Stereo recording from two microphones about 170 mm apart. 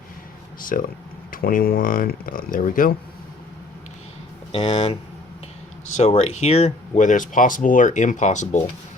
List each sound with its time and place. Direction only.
0.6 s speech: 55° left (ahead or behind)
4.5 s speech: 35° left (ahead or behind)
6.0 s speech: 40° left (ahead or behind)